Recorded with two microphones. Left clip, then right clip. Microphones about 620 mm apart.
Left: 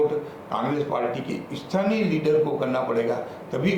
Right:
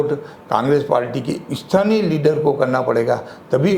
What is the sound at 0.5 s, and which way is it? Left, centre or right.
A man's voice, right.